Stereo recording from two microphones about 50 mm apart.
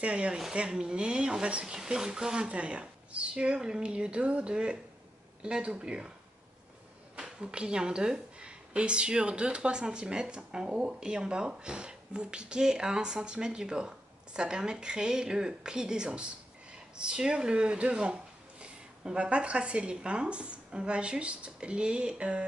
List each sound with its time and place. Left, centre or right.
0.0 s speech: right
7.2 s a woman's voice: centre